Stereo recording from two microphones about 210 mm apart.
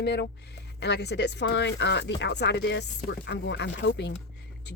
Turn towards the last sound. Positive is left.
turn(degrees=55)  # may be behind; listen again after turning